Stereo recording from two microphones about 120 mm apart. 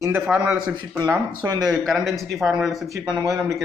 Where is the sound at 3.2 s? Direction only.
25° right (ahead or behind).